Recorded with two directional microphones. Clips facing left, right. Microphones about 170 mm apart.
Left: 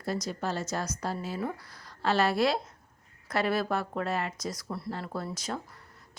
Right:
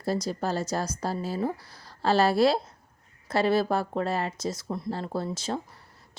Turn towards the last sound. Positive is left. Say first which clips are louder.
# right 5 dB
turn(degrees=-30)  # may be behind; listen again after turning